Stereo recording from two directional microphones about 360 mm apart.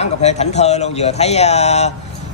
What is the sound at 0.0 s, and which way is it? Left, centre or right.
Speech, centre.